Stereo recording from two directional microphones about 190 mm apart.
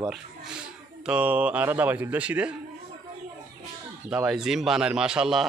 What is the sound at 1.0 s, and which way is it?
A man's voice, 5° right (ahead or behind).